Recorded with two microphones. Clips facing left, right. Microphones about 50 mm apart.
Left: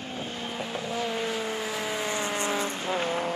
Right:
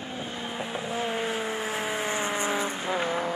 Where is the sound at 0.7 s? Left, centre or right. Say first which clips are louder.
Right 1 dB; right.